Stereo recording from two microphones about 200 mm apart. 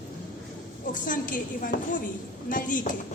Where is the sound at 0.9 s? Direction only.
40° left (ahead or behind).